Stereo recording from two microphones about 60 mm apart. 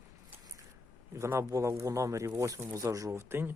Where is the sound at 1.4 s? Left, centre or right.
Right.